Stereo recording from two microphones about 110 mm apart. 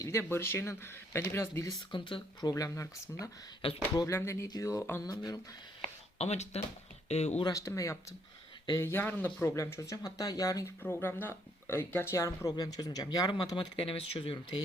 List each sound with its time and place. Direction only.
0.0 s speech: 25° left (ahead or behind)
1.9 s speech: 50° left (ahead or behind)
2.5 s speech: 30° left (ahead or behind)
4.4 s speech: 35° left (ahead or behind)
5.8 s a sound: 75° left (ahead or behind)
7.1 s speech: 75° left (ahead or behind)
7.5 s speech: 30° left (ahead or behind)
10.8 s speech: 20° left (ahead or behind); by 13.7 s 40° left (ahead or behind)
13.8 s speech: 60° left (ahead or behind)